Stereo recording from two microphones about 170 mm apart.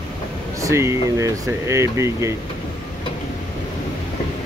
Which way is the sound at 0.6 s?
15° right (ahead or behind).